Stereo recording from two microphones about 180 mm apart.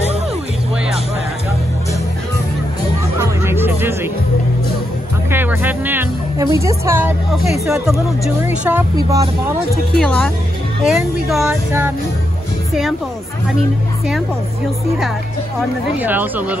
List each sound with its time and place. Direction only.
3.4 s music: 10° right (ahead or behind)
5.3 s music: 10° right (ahead or behind)
6.4 s speech: 15° right (ahead or behind)
7.6 s speech: 5° right (ahead or behind)
9.9 s speech: 5° left (ahead or behind)
16.0 s speech: 10° right (ahead or behind)